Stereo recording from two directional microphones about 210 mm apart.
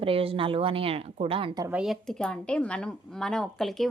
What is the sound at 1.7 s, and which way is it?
Speech, centre (ahead or behind).